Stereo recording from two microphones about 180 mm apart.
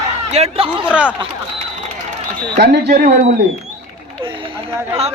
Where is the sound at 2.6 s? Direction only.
70° right (ahead or behind).